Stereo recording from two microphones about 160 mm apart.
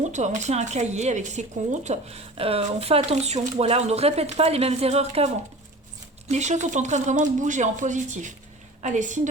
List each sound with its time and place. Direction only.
0.0 s speech: 50° right (ahead or behind)